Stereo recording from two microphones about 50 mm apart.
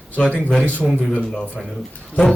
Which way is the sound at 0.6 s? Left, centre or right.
Left.